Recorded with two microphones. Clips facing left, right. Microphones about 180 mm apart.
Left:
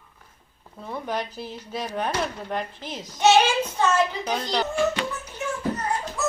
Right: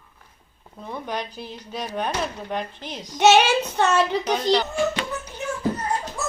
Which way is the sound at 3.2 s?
70° right (ahead or behind).